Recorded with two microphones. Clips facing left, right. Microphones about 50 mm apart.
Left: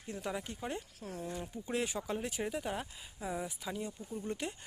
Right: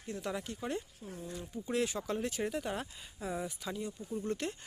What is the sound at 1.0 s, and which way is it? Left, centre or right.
Speech, left.